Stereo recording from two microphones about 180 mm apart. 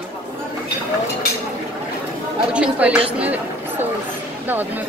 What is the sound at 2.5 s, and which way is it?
Speech, 5° right (ahead or behind).